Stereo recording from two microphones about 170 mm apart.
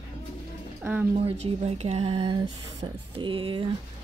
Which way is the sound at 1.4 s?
35° right (ahead or behind).